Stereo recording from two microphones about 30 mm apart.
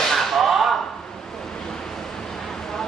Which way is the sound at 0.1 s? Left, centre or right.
Centre.